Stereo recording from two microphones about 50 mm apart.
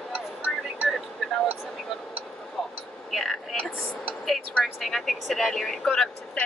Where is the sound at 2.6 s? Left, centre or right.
Centre.